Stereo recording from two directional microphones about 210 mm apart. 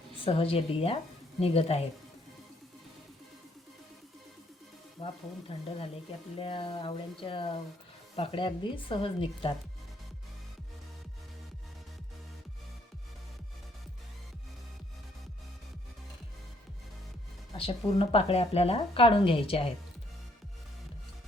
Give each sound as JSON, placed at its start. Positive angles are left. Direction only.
{"t": 0.2, "sound": "speech", "side_deg": 25}
{"t": 5.0, "sound": "speech", "side_deg": 25}
{"t": 17.6, "sound": "speech", "side_deg": 25}